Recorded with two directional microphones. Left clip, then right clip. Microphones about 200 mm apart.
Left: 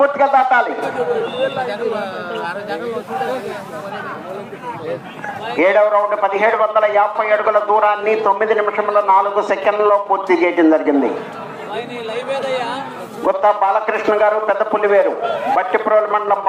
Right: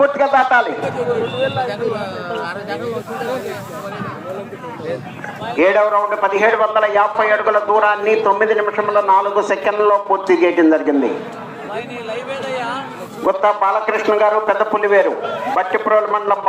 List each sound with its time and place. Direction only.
0.0 s a man's voice: 10° right (ahead or behind)
1.6 s a man's voice: 30° right (ahead or behind)
5.5 s a man's voice: 10° right (ahead or behind)
12.1 s a man's voice: 5° right (ahead or behind)